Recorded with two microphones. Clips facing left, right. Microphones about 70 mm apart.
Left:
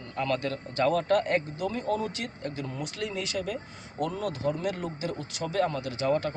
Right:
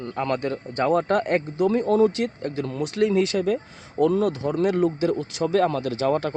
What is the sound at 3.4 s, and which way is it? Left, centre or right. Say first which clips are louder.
Speech: right 9 dB; right.